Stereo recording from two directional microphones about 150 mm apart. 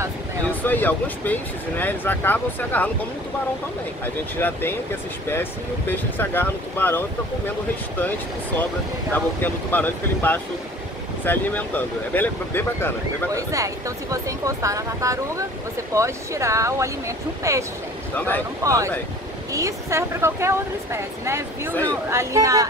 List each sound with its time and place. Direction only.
0.7 s speech: 10° left (ahead or behind)
4.0 s speech: 15° left (ahead or behind)
9.1 s speech: 10° left (ahead or behind)
13.3 s speech: 20° right (ahead or behind)
18.1 s speech: 10° left (ahead or behind)
18.6 s speech: 20° right (ahead or behind)